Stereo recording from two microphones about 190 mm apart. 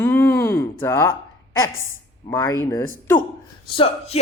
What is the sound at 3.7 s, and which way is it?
Speech, 30° left (ahead or behind).